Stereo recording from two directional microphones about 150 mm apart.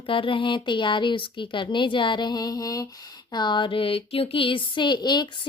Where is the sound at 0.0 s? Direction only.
35° left (ahead or behind).